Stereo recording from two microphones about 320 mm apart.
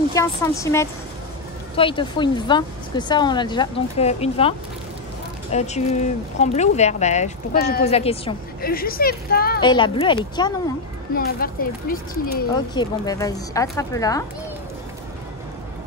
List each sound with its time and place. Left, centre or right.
0.1 s speech: centre; by 9.6 s left
9.6 s speech: centre
11.1 s speech: left
12.5 s speech: centre